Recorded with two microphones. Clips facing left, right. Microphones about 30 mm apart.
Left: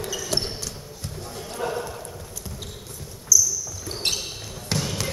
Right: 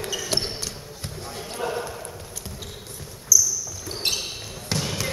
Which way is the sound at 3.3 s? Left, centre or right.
Centre.